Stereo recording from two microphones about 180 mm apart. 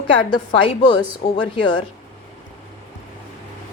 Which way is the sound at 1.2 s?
55° left (ahead or behind).